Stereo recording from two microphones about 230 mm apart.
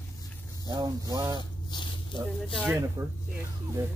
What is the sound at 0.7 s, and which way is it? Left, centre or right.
Speech, centre.